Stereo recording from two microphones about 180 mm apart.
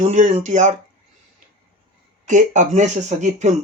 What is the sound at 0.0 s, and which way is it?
Speech, 40° right (ahead or behind).